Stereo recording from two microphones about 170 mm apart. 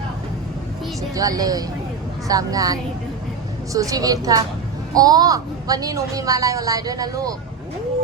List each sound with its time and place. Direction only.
1.1 s a woman's voice: 20° right (ahead or behind)